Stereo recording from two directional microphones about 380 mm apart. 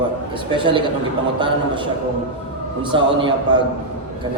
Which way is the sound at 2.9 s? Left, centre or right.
Centre.